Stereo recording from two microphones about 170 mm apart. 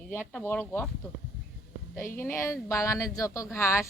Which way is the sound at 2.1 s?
15° left (ahead or behind).